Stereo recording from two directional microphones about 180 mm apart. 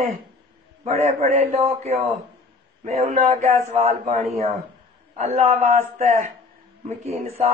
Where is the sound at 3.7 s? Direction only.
45° right (ahead or behind).